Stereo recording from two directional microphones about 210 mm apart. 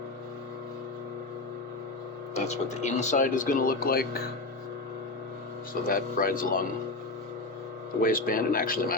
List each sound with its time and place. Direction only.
2.3 s speech: 35° left (ahead or behind)
5.9 s speech: 40° left (ahead or behind)
8.0 s speech: 40° left (ahead or behind)